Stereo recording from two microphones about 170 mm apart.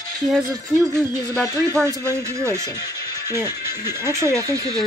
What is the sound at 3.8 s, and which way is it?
Speech, 15° right (ahead or behind).